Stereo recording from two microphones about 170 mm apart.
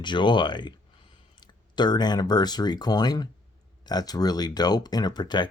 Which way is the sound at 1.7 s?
25° left (ahead or behind).